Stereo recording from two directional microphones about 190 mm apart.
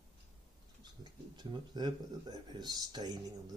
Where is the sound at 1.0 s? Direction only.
20° right (ahead or behind).